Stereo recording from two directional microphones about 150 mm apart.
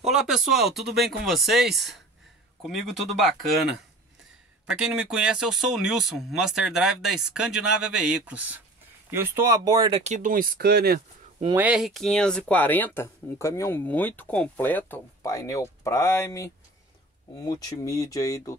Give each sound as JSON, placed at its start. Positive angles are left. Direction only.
{"t": 0.1, "sound": "speech", "side_deg": -5}
{"t": 4.6, "sound": "speech", "side_deg": -5}
{"t": 9.8, "sound": "speech", "side_deg": -40}
{"t": 10.1, "sound": "speech", "side_deg": -65}
{"t": 11.5, "sound": "speech", "side_deg": -10}
{"t": 15.3, "sound": "speech", "side_deg": 20}